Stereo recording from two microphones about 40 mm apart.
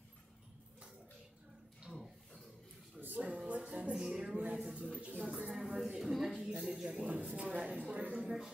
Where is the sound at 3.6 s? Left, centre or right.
Right.